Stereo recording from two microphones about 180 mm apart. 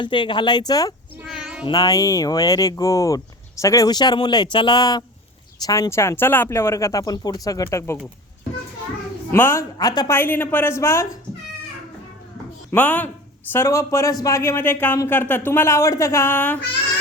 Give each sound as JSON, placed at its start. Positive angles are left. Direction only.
{"t": 0.0, "sound": "speech", "side_deg": 25}
{"t": 1.2, "sound": "meow", "side_deg": -5}
{"t": 1.6, "sound": "a man's voice", "side_deg": 20}
{"t": 9.3, "sound": "a man's voice", "side_deg": 15}
{"t": 12.7, "sound": "a man's voice", "side_deg": 10}